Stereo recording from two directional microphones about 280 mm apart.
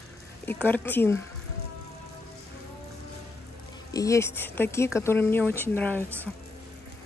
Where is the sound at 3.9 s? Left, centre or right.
Centre.